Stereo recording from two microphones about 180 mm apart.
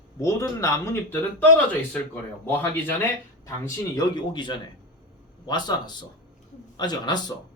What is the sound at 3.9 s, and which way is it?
Speech, 25° left (ahead or behind).